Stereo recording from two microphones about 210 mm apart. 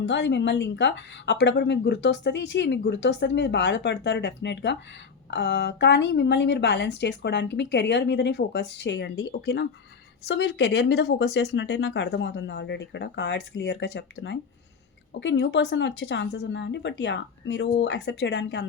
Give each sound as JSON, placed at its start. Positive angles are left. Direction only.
{"t": 0.0, "sound": "a woman's voice", "side_deg": 55}